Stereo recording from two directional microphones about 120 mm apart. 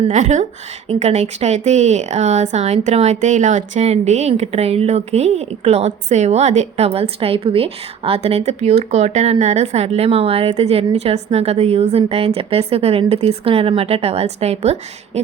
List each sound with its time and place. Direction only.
0.1 s speech: 90° right
0.9 s speech: 70° right (ahead or behind)